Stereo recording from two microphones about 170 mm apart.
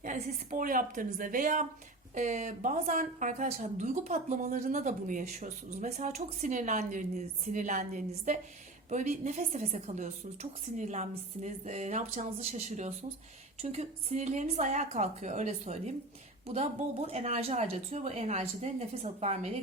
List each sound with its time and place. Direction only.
0.0 s a woman's voice: 50° right (ahead or behind)